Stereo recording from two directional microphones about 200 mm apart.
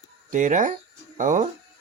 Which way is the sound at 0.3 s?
40° right (ahead or behind).